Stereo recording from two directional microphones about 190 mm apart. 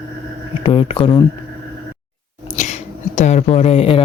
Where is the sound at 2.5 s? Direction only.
35° left (ahead or behind).